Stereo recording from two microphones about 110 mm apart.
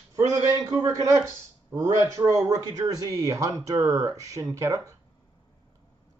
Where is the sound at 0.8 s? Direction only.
25° right (ahead or behind).